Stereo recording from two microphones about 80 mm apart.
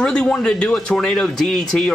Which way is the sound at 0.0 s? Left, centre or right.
Centre.